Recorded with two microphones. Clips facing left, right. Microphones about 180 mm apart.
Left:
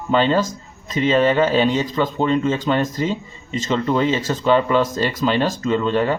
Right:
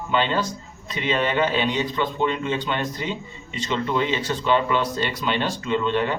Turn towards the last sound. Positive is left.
turn(degrees=40)  # may be behind; listen again after turning